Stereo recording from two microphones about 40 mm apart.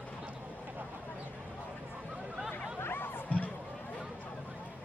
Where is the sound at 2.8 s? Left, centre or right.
Left.